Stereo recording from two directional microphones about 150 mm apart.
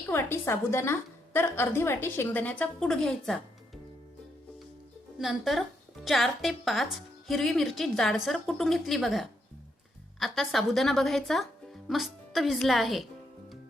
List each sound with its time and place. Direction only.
0.1 s a woman's voice: 15° left (ahead or behind)
5.2 s speech: centre (ahead or behind)